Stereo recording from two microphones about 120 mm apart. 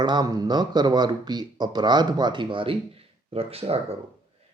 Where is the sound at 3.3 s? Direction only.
55° right (ahead or behind).